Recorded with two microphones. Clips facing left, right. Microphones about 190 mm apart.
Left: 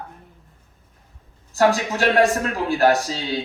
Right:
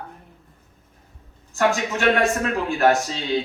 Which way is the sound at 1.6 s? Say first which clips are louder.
Left 3 dB; 35° left (ahead or behind).